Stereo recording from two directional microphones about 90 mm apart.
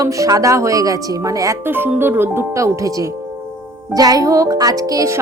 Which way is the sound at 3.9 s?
45° right (ahead or behind).